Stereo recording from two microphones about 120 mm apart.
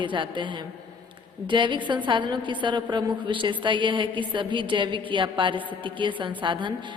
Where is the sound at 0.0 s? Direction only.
40° right (ahead or behind).